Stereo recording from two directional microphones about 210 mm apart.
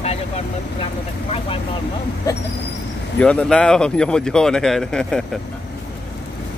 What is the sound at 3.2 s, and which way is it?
Speech, 5° left (ahead or behind).